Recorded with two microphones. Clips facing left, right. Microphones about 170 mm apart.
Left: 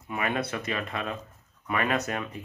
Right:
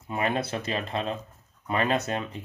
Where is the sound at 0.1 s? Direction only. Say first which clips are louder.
Right 2 dB; 30° right (ahead or behind).